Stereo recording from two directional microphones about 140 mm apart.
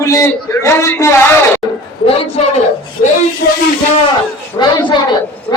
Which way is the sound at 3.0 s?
85° left.